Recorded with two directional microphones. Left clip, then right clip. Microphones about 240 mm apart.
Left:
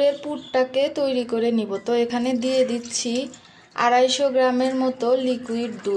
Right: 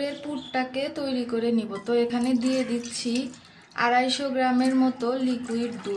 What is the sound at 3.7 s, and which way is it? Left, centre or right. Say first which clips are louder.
Speech: left 5 dB; left.